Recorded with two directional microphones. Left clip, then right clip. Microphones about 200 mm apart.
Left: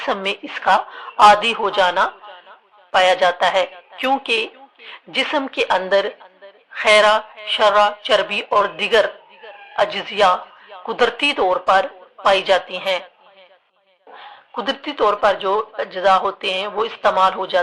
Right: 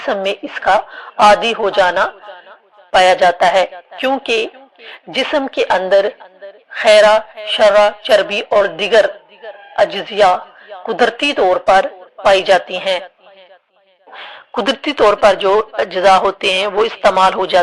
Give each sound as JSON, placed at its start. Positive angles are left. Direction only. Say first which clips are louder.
{"t": 0.0, "sound": "a woman's voice", "louder": "right 4 dB", "side_deg": -20}
{"t": 14.2, "sound": "speech", "louder": "right 7 dB", "side_deg": -30}